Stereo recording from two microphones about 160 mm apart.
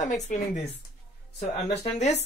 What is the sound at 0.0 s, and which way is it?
Speech, 50° left (ahead or behind).